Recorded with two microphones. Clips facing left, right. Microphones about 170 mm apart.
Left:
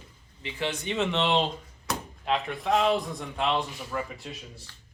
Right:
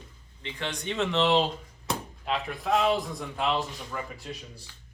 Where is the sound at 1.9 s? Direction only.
25° right (ahead or behind).